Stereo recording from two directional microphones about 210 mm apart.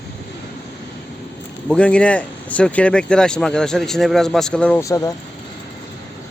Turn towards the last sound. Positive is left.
turn(degrees=15)  # may be behind; listen again after turning